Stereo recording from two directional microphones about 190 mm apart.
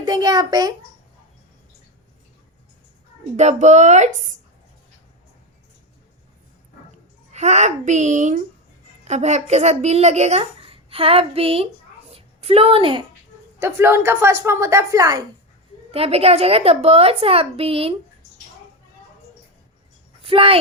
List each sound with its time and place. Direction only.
0.0 s a child's voice: 20° right (ahead or behind)
3.3 s a woman's voice: 40° right (ahead or behind)
7.3 s a woman's voice: 35° right (ahead or behind)
12.1 s a sound: 30° right (ahead or behind)
13.6 s a woman's voice: 15° right (ahead or behind)
15.9 s a woman's voice: 30° right (ahead or behind)
20.2 s speech: 30° right (ahead or behind)